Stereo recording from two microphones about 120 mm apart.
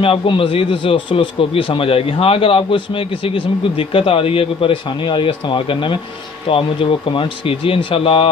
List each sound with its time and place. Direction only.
0.0 s a man's voice: 50° left (ahead or behind)